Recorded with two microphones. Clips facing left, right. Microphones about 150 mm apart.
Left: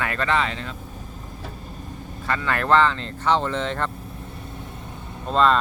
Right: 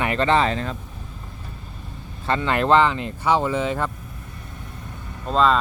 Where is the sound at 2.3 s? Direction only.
25° right (ahead or behind).